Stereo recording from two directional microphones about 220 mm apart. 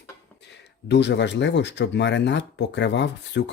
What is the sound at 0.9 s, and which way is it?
Speech, 50° left (ahead or behind).